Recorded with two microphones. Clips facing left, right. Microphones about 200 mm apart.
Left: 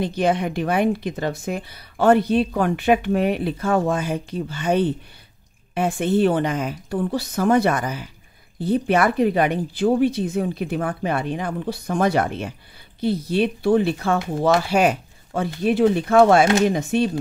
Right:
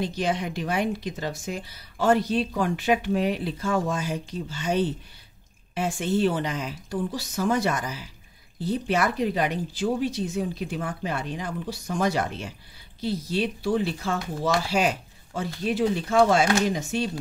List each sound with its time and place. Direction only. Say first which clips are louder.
0.0 s a woman's voice: left 6 dB; 55° left (ahead or behind)